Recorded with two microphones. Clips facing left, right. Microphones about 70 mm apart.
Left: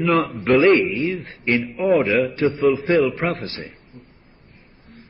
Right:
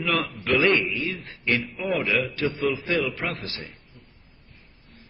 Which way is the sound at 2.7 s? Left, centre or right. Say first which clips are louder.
Left 8 dB; left.